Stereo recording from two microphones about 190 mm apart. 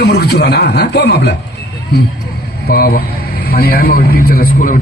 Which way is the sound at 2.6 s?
55° left (ahead or behind).